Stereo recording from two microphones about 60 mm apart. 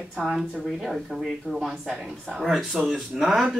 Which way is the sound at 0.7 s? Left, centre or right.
Centre.